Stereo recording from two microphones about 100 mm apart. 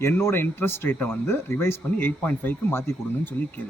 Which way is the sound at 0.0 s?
25° left (ahead or behind).